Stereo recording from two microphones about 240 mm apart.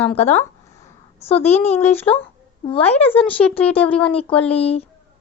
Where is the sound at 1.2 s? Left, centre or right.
Left.